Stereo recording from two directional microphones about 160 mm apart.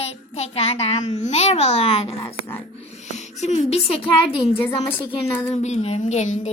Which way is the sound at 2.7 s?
40° left (ahead or behind).